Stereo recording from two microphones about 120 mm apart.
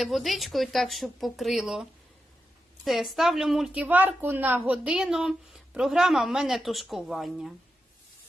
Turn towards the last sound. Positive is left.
turn(degrees=0)  # may be behind; listen again after turning